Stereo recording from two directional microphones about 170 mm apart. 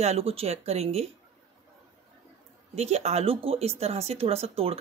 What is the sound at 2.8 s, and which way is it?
Speech, 40° right (ahead or behind).